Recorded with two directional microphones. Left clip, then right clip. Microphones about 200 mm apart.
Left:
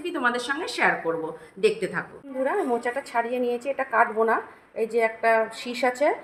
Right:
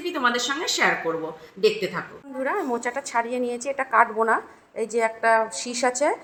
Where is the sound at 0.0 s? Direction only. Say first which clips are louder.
Right 2 dB; 25° right (ahead or behind).